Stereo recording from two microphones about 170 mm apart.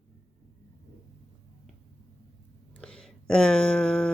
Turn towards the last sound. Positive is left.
turn(degrees=5)  # may be behind; listen again after turning